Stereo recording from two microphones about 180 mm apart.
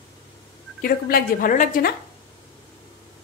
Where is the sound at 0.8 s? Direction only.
55° left (ahead or behind).